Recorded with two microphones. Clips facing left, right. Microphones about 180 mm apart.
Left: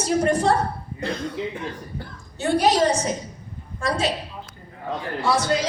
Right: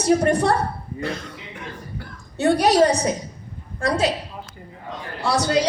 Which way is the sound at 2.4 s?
65° right (ahead or behind).